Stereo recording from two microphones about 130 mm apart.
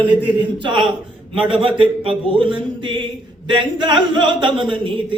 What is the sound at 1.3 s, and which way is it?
A man's voice, 45° right (ahead or behind).